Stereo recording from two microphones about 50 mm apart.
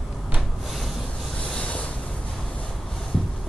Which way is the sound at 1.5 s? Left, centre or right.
Left.